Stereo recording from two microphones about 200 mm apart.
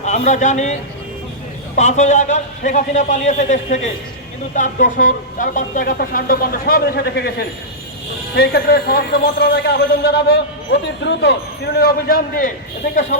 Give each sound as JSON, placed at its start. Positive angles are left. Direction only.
{"t": 0.0, "sound": "a man's voice", "side_deg": 35}